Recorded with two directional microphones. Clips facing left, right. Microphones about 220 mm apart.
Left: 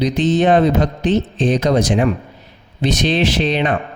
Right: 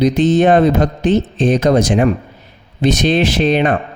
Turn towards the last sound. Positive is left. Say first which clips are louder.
# right 3 dB
turn(degrees=-50)  # may be behind; listen again after turning